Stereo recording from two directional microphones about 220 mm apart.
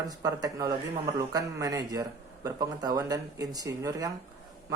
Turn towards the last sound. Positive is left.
turn(degrees=-15)  # may be behind; listen again after turning